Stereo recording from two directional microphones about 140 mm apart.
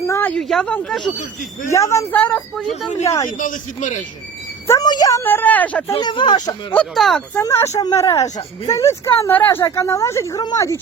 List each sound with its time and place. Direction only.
0.0 s speech: 15° left (ahead or behind)
0.3 s speech: centre (ahead or behind)
1.7 s a woman's voice: 20° left (ahead or behind); by 2.7 s 5° left (ahead or behind)
3.0 s a woman's voice: 20° left (ahead or behind)
3.2 s a man's voice: 70° left (ahead or behind)
4.6 s a woman's voice: 20° left (ahead or behind)
5.9 s speech: 35° left (ahead or behind)
6.7 s speech: centre (ahead or behind)
7.3 s a woman's voice: 20° left (ahead or behind)